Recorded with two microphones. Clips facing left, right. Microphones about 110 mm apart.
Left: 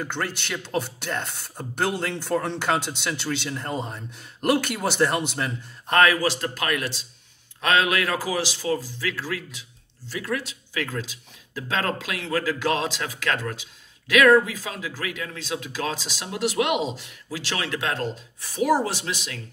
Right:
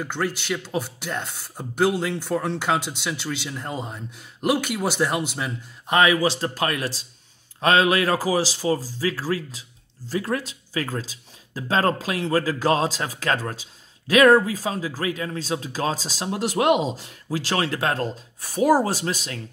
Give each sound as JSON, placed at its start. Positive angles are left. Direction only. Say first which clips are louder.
{"t": 0.0, "sound": "speech", "louder": "right 3 dB", "side_deg": -5}
{"t": 6.1, "sound": "a man's voice", "louder": "right 3 dB", "side_deg": -25}